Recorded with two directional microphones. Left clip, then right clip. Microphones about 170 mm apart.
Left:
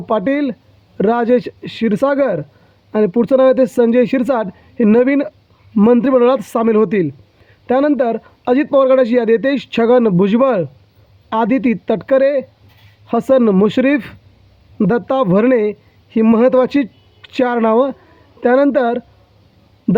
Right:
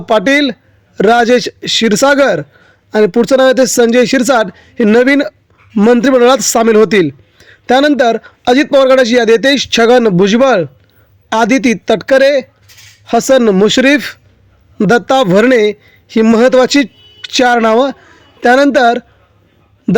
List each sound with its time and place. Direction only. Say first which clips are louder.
0.0 s a man's voice: right 7 dB; 35° right (ahead or behind)